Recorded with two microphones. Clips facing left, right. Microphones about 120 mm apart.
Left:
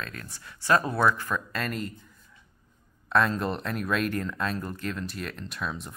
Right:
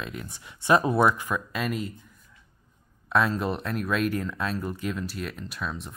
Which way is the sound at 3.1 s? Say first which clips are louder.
Even; 5° right (ahead or behind).